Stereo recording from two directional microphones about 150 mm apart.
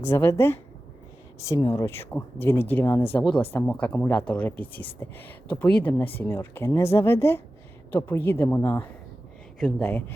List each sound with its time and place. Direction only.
0.0 s speech: 20° left (ahead or behind)
9.6 s speech: 5° left (ahead or behind)